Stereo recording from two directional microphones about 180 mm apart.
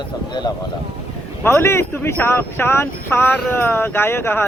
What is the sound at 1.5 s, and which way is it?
Speech, 15° left (ahead or behind).